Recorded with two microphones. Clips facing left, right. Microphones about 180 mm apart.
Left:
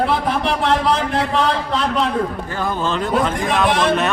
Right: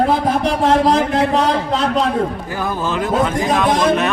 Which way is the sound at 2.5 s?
10° right (ahead or behind).